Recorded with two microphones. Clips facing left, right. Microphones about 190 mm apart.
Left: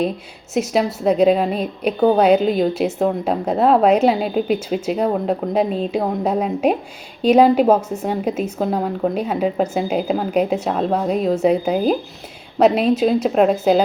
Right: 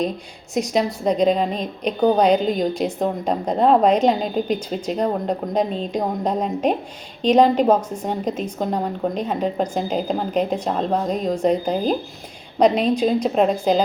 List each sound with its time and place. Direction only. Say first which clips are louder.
0.5 s a woman's voice: left 2 dB; 5° left (ahead or behind)